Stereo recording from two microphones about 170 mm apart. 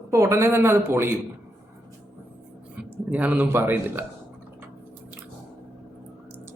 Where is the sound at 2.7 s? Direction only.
10° right (ahead or behind).